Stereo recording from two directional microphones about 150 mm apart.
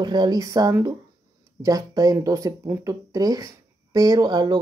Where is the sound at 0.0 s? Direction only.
30° right (ahead or behind).